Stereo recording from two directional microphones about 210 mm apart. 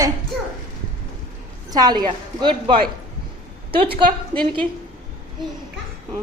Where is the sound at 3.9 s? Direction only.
25° right (ahead or behind).